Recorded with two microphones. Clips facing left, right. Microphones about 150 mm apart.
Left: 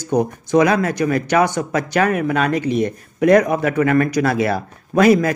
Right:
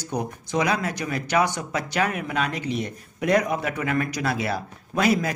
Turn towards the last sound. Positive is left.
turn(degrees=55)  # may be behind; listen again after turning